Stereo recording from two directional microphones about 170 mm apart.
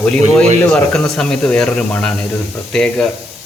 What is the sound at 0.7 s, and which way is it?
Speech, centre (ahead or behind).